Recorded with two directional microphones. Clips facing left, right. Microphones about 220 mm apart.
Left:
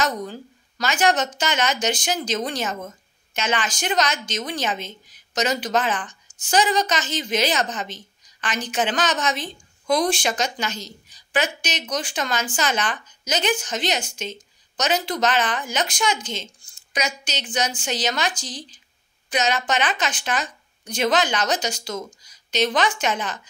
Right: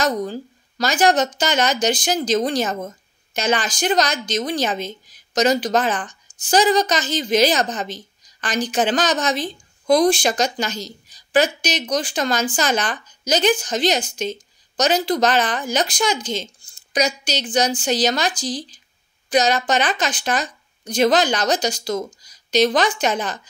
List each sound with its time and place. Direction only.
0.0 s a woman's voice: 35° right (ahead or behind)